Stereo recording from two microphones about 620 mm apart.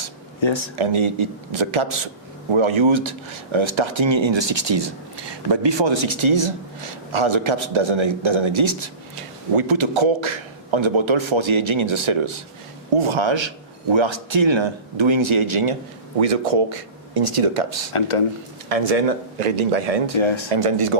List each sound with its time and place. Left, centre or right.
0.4 s speech: left
0.8 s speech: right
16.2 s speech: right
18.7 s speech: right
20.1 s speech: left
20.5 s speech: right